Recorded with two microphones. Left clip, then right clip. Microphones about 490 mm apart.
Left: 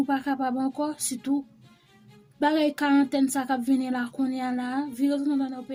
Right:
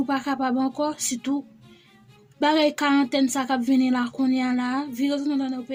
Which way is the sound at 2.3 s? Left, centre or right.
Left.